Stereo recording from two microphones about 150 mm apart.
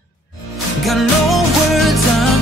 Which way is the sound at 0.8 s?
Centre (ahead or behind).